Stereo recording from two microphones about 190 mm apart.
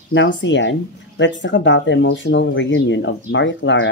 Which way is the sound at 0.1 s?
75° left (ahead or behind).